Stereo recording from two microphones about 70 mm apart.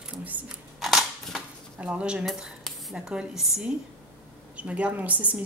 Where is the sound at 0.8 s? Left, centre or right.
Centre.